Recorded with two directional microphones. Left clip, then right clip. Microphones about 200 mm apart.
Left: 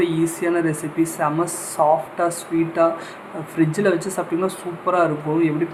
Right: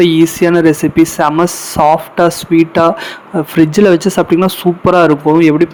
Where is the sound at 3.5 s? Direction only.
40° right (ahead or behind).